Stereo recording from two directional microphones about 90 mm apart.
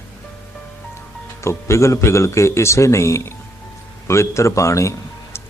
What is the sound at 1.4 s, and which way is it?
Speech, 30° left (ahead or behind).